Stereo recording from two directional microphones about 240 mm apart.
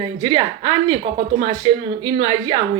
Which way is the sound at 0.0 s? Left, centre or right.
Centre.